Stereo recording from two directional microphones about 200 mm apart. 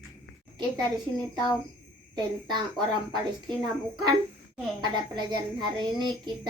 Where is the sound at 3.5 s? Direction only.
Centre (ahead or behind).